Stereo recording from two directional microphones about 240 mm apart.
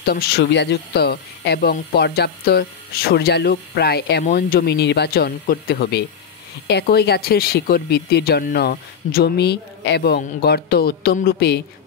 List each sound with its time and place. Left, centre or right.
0.0 s speech: left